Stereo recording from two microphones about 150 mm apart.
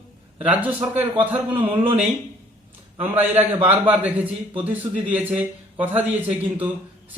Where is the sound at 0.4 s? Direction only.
10° right (ahead or behind).